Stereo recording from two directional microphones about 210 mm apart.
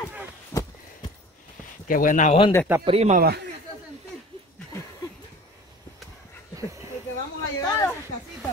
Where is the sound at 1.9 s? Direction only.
40° left (ahead or behind).